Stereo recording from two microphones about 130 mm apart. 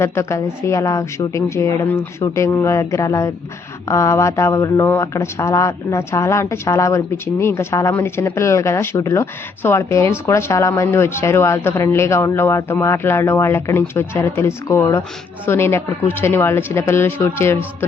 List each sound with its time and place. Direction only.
0.0 s speech: 20° left (ahead or behind)